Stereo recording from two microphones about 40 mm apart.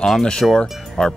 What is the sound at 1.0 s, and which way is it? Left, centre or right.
Speech, left.